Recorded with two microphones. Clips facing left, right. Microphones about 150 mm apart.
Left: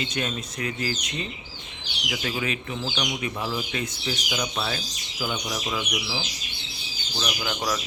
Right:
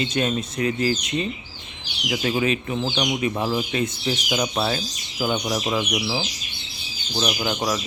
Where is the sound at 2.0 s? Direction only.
30° right (ahead or behind).